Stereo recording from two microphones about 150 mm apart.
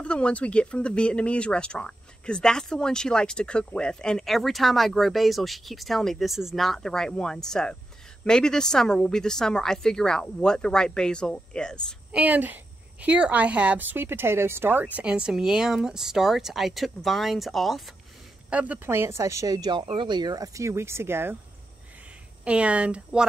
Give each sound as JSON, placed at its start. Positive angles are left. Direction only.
{"t": 0.0, "sound": "speech", "side_deg": 5}
{"t": 12.1, "sound": "a woman's voice", "side_deg": -10}
{"t": 22.4, "sound": "a woman's voice", "side_deg": -10}